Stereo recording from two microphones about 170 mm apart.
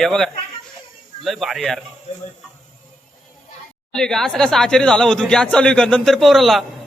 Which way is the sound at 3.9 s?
5° left (ahead or behind).